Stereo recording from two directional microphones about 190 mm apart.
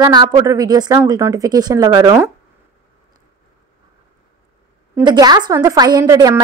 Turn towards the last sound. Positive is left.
turn(degrees=-15)  # may be behind; listen again after turning